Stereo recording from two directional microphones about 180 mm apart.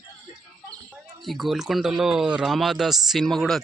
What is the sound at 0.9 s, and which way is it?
Speech, centre (ahead or behind).